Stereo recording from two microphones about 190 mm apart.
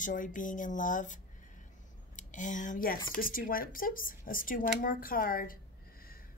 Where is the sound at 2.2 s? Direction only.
40° left (ahead or behind).